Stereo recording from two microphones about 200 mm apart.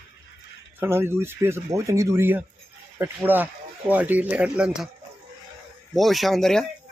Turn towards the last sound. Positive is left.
turn(degrees=0)  # may be behind; listen again after turning